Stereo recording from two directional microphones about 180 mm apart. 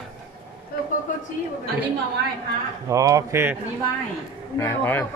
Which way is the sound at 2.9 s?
20° right (ahead or behind).